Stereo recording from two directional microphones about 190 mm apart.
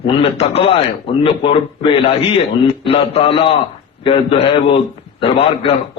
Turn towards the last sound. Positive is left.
turn(degrees=30)  # may be behind; listen again after turning